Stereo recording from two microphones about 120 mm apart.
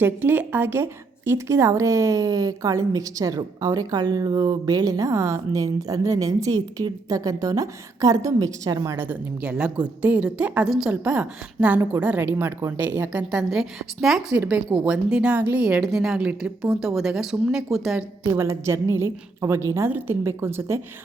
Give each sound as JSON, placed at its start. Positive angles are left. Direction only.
{"t": 0.0, "sound": "a woman's voice", "side_deg": -20}
{"t": 9.0, "sound": "speech", "side_deg": -10}
{"t": 18.2, "sound": "a woman's voice", "side_deg": -20}